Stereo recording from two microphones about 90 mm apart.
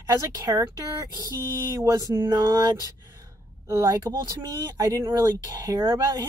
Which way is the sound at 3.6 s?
30° right (ahead or behind).